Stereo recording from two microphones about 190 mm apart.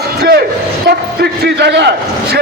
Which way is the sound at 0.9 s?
60° right (ahead or behind).